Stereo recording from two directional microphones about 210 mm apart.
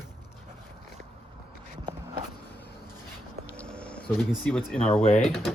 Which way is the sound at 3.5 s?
5° left (ahead or behind).